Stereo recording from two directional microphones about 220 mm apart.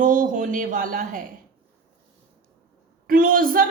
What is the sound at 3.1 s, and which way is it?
Speech, 40° right (ahead or behind).